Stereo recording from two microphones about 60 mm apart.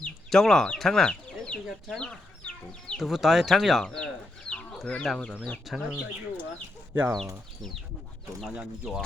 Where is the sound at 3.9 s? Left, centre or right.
Centre.